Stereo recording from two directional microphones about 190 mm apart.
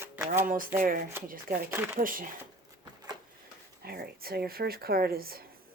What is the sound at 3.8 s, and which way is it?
Speech, 55° right (ahead or behind).